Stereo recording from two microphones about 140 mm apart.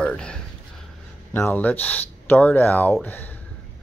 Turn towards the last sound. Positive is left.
turn(degrees=15)  # may be behind; listen again after turning